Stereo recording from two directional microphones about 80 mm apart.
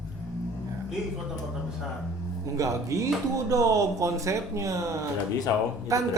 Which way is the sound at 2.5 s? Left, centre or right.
Right.